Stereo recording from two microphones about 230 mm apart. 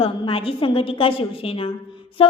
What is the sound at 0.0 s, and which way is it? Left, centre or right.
A woman's voice, left.